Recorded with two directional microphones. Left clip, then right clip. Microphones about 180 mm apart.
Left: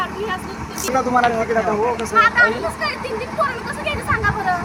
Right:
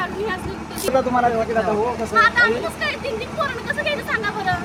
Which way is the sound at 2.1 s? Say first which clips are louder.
Left 1 dB; 5° left (ahead or behind).